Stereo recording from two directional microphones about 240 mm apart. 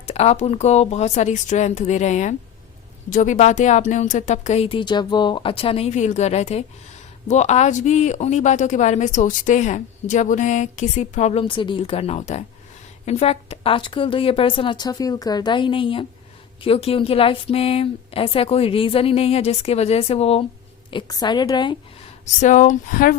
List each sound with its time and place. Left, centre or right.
0.0 s a woman's voice: left
22.4 s speech: left